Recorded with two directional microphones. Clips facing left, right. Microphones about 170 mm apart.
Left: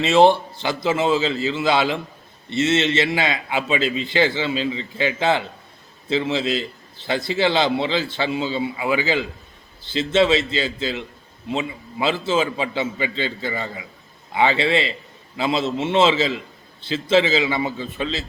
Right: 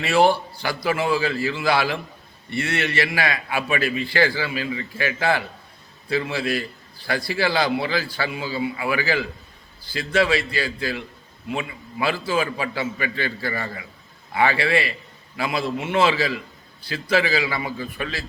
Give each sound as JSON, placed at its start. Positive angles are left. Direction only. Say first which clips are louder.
{"t": 0.0, "sound": "a man's voice", "louder": "left 4 dB", "side_deg": 20}